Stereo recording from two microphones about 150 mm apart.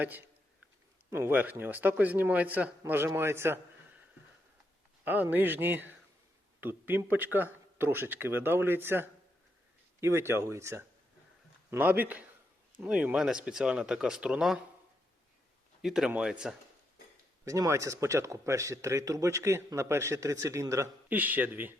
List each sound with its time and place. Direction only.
0.0 s a man's voice: 10° right (ahead or behind)
5.0 s a man's voice: 10° right (ahead or behind)
15.8 s speech: 5° right (ahead or behind)
17.4 s speech: 20° right (ahead or behind)